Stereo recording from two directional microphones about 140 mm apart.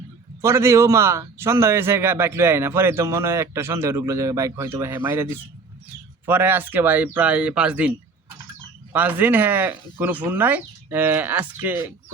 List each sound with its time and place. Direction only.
0.4 s a man's voice: 20° right (ahead or behind)